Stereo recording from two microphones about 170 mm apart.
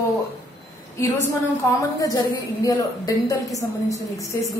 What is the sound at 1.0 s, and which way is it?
A woman's voice, 20° left (ahead or behind).